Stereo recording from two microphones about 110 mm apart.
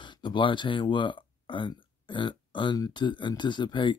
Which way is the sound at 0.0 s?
45° left (ahead or behind).